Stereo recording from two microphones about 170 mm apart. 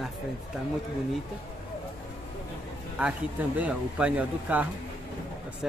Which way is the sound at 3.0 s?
10° right (ahead or behind).